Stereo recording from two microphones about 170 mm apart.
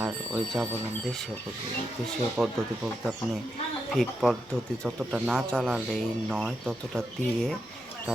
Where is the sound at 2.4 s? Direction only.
5° right (ahead or behind).